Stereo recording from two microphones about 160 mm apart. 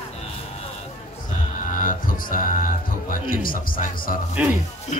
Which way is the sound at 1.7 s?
55° left (ahead or behind).